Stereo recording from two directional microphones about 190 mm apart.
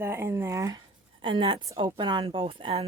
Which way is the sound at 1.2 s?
25° right (ahead or behind).